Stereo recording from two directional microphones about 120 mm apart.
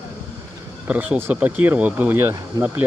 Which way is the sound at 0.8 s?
15° right (ahead or behind).